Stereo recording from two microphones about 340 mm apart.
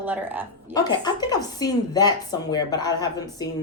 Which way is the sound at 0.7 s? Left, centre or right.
Centre.